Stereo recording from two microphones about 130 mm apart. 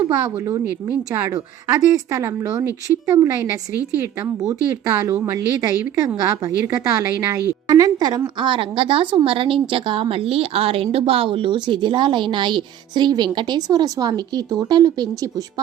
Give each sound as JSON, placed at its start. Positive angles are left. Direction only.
{"t": 0.3, "sound": "speech", "side_deg": -25}
{"t": 0.6, "sound": "speech", "side_deg": -15}
{"t": 1.3, "sound": "a woman's voice", "side_deg": -30}